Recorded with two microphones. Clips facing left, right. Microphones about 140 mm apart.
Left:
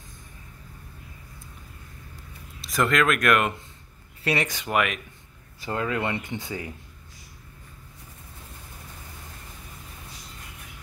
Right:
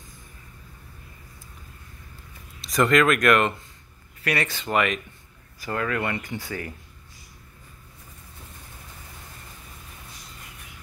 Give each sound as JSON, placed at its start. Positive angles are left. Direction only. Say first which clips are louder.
{"t": 2.6, "sound": "speech", "louder": "right 3 dB", "side_deg": 0}
{"t": 4.2, "sound": "speech", "louder": "left 1 dB", "side_deg": 20}
{"t": 4.7, "sound": "speech", "louder": "right 1 dB", "side_deg": 5}
{"t": 5.6, "sound": "speech", "louder": "even", "side_deg": 20}